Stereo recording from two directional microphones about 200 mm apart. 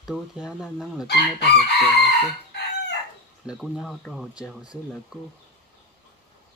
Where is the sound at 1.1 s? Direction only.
55° left (ahead or behind).